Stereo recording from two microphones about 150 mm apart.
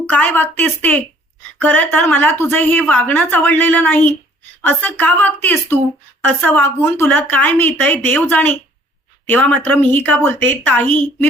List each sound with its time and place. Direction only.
0.1 s a woman's voice: 10° left (ahead or behind)